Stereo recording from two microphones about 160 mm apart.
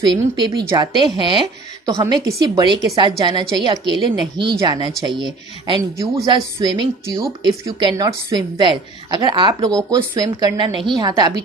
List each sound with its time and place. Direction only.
0.1 s speech: 30° right (ahead or behind)